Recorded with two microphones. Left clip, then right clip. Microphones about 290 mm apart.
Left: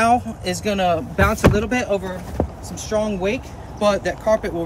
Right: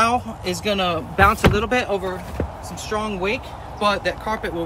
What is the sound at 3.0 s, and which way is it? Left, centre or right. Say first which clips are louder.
Speech: left 1 dB; centre.